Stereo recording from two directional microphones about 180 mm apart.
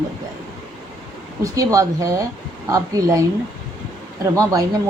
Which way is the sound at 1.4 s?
20° right (ahead or behind).